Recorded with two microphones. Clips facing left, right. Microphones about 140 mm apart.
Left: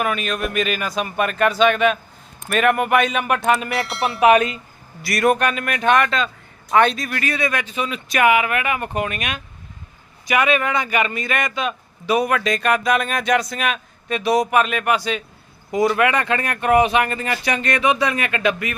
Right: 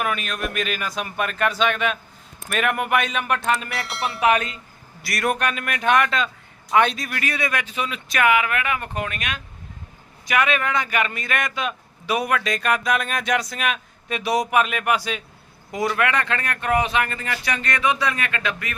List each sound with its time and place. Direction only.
0.0 s a man's voice: centre (ahead or behind)
4.2 s speech: 15° left (ahead or behind)
5.0 s a man's voice: centre (ahead or behind); by 9.4 s 15° left (ahead or behind)
10.2 s a man's voice: 5° left (ahead or behind)